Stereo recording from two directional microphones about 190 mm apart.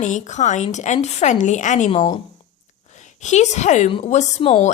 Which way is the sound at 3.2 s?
35° left (ahead or behind).